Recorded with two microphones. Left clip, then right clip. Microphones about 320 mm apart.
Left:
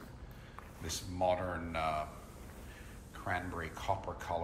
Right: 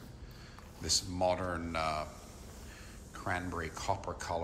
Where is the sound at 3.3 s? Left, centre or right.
Centre.